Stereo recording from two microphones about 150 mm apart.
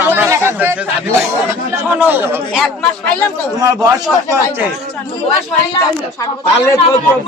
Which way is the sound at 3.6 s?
25° right (ahead or behind).